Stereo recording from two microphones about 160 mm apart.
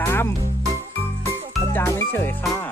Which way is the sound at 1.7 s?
15° left (ahead or behind).